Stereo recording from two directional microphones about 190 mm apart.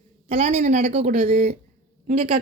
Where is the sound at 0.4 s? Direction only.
40° right (ahead or behind).